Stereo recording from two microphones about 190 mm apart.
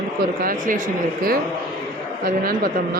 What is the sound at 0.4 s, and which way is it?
Speech, 45° right (ahead or behind).